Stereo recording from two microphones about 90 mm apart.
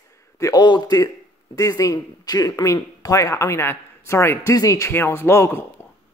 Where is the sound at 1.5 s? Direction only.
40° left (ahead or behind).